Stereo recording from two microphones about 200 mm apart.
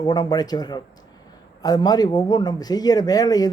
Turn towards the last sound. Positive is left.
turn(degrees=20)  # may be behind; listen again after turning